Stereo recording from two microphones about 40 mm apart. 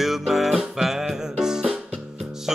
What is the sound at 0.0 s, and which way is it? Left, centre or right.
Music, centre.